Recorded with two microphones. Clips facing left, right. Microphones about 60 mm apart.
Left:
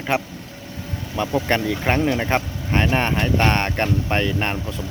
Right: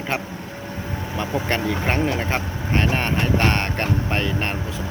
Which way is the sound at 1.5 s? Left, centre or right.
Centre.